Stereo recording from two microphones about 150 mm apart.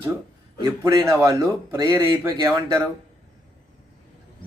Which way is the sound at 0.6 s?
20° right (ahead or behind).